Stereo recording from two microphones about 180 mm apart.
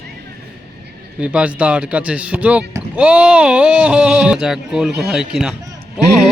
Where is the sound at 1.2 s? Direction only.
5° right (ahead or behind).